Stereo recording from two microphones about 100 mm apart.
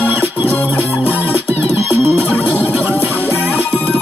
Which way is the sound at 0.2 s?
20° right (ahead or behind).